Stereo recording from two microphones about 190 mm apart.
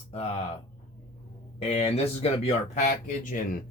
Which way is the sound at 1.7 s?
35° left (ahead or behind).